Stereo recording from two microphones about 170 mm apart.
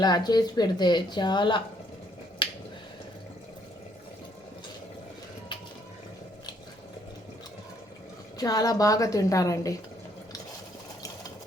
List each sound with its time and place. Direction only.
0.0 s speech: 25° left (ahead or behind)
2.4 s finger snapping: 30° left (ahead or behind)
8.4 s speech: 20° left (ahead or behind)